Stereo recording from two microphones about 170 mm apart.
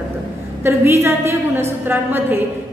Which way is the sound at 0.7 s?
15° right (ahead or behind).